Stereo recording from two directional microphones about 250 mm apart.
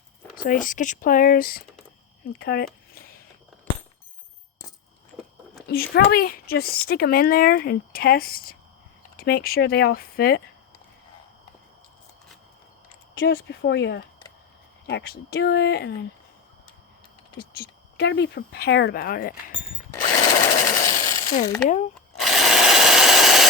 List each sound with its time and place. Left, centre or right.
0.3 s speech: left
2.9 s a sound: left
5.6 s speech: left
13.1 s speech: left
17.3 s speech: left
20.0 s tools: left
20.5 s a sound: left
22.2 s wood: centre